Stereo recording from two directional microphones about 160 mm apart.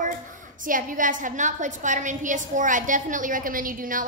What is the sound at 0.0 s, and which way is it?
A woman's voice, 55° right (ahead or behind).